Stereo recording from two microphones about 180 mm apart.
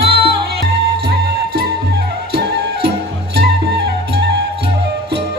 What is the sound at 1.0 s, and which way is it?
Music, 60° right (ahead or behind).